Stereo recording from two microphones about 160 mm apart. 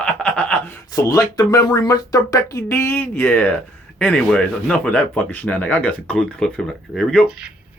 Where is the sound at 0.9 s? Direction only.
20° left (ahead or behind); by 7.4 s 5° left (ahead or behind).